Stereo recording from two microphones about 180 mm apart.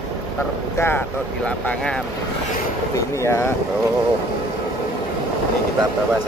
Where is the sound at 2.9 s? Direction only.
15° left (ahead or behind).